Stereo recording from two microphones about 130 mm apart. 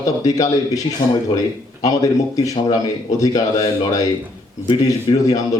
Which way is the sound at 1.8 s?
25° left (ahead or behind).